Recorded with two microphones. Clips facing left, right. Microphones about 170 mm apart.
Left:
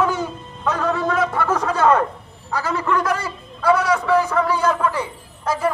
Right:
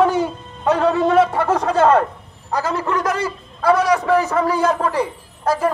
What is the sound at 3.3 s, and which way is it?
A man's voice, 40° right (ahead or behind).